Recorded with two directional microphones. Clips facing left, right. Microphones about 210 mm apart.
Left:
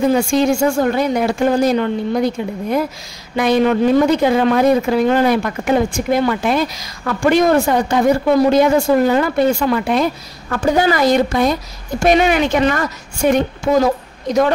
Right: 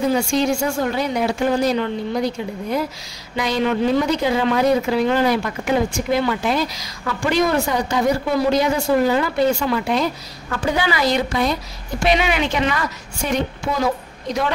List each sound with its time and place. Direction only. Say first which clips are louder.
0.1 s a woman's voice: left 4 dB; 50° left (ahead or behind)